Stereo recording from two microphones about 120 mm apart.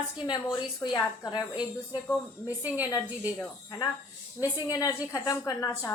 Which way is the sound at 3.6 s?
25° left (ahead or behind).